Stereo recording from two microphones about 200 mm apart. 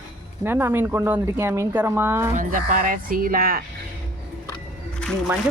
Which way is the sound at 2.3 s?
40° right (ahead or behind).